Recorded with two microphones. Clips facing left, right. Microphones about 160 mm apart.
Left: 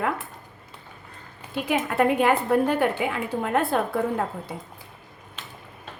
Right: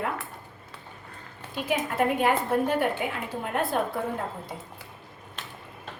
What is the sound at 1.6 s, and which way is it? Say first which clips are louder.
A woman's voice: left 3 dB; 80° left.